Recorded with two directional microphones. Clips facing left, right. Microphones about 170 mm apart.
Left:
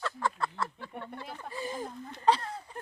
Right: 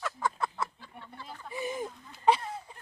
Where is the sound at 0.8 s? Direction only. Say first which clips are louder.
Left 6 dB; 60° left (ahead or behind).